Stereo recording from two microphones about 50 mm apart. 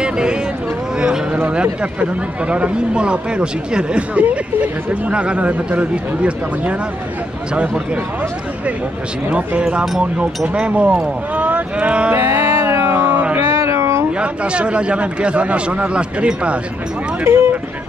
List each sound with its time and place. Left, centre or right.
0.0 s a sound: centre
1.5 s speech: right
9.3 s speech: right
9.7 s speech: centre
12.3 s music: right
12.8 s cat: right
13.4 s music: right
14.2 s speech: right
17.2 s speech: right